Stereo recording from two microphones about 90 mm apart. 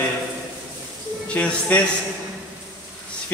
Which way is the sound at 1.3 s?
15° left (ahead or behind).